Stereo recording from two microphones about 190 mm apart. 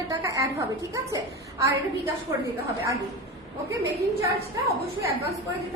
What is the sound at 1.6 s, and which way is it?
Speech, 15° right (ahead or behind).